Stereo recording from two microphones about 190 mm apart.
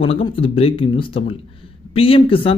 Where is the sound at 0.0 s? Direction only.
30° left (ahead or behind).